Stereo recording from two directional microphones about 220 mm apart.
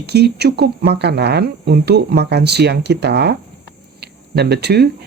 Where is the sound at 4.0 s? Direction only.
50° right (ahead or behind).